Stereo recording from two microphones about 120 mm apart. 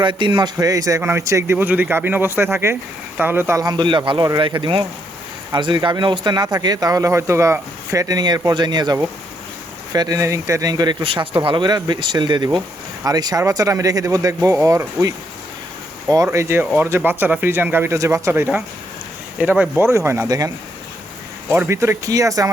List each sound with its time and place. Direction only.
0.0 s a man's voice: 40° right (ahead or behind)
11.0 s a man's voice: 45° right (ahead or behind); by 14.8 s 25° right (ahead or behind)
16.0 s a man's voice: 25° right (ahead or behind)
21.5 s a man's voice: 20° right (ahead or behind)